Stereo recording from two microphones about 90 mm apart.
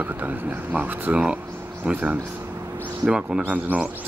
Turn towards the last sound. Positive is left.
turn(degrees=-10)  # may be behind; listen again after turning